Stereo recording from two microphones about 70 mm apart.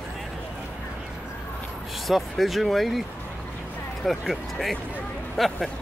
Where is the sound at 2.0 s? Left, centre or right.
Centre.